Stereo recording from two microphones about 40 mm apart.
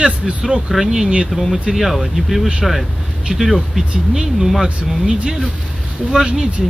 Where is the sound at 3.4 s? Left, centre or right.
Centre.